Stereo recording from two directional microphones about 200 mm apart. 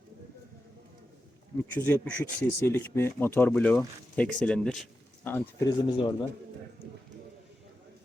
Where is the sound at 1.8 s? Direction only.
10° left (ahead or behind).